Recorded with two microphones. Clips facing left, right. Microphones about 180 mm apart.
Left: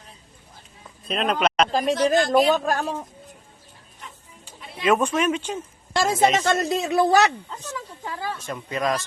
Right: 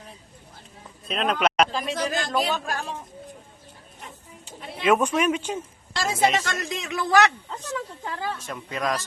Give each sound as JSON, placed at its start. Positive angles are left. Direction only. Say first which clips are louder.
{"t": 1.0, "sound": "speech", "louder": "left 1 dB", "side_deg": 0}
{"t": 1.7, "sound": "a man's voice", "louder": "left 7 dB", "side_deg": 45}
{"t": 4.8, "sound": "speech", "louder": "even", "side_deg": -10}
{"t": 5.9, "sound": "a man's voice", "louder": "left 3 dB", "side_deg": 50}
{"t": 6.4, "sound": "speech", "louder": "left 9 dB", "side_deg": 35}
{"t": 7.6, "sound": "speech", "louder": "right 5 dB", "side_deg": 0}